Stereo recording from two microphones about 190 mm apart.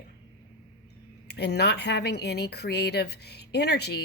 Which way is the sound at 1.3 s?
60° left (ahead or behind).